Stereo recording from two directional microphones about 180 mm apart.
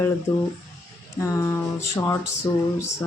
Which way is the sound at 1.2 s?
15° left (ahead or behind).